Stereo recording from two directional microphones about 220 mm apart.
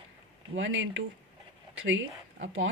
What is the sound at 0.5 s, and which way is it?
Speech, 60° right (ahead or behind).